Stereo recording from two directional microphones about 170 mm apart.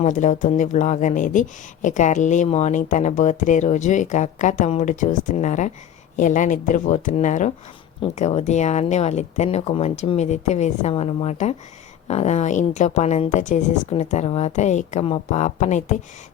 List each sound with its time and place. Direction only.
0.0 s speech: 45° left (ahead or behind)